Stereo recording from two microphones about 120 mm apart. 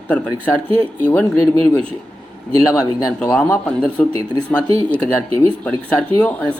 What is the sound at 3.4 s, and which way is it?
Speech, 15° left (ahead or behind).